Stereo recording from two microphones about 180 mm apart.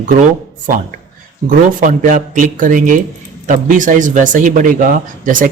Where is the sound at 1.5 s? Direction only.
50° right (ahead or behind).